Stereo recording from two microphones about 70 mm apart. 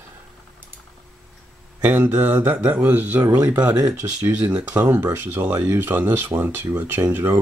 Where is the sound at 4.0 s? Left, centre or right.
Right.